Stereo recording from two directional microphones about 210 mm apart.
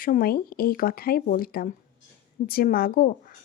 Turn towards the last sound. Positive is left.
turn(degrees=40)  # may be behind; listen again after turning